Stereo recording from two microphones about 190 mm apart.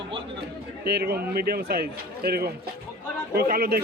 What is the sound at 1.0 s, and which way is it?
A man's voice, 55° right (ahead or behind).